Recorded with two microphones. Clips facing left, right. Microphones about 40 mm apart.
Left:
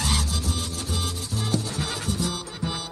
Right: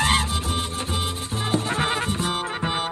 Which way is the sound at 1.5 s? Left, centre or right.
Right.